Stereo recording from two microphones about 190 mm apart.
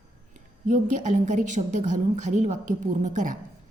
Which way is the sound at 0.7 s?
40° right (ahead or behind).